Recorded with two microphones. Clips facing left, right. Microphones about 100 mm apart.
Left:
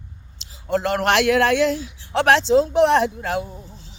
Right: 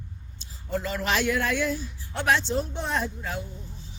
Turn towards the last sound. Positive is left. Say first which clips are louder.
# left 9 dB
turn(degrees=65)  # may be behind; listen again after turning